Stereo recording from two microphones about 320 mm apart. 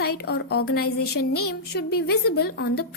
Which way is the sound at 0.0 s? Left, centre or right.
Left.